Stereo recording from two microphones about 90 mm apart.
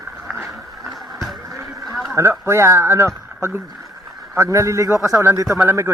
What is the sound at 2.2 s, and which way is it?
A man's voice, 30° right (ahead or behind).